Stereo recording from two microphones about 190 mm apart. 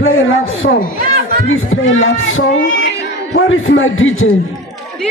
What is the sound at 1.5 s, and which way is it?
Speech, 90° left.